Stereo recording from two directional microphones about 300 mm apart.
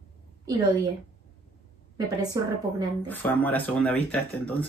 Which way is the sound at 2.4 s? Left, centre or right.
Centre.